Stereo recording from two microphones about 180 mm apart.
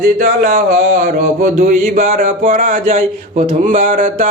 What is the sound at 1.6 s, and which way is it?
Speech, 50° right (ahead or behind).